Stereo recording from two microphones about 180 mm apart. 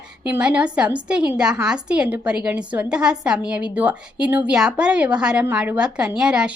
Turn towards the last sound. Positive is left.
turn(degrees=-5)  # may be behind; listen again after turning